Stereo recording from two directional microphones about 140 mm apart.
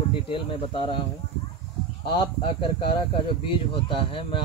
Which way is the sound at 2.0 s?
35° left (ahead or behind).